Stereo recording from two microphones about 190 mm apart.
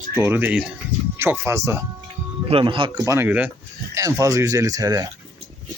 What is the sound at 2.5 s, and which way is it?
Speech, 25° right (ahead or behind).